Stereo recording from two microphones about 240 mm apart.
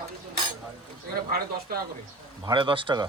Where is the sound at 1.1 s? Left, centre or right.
Right.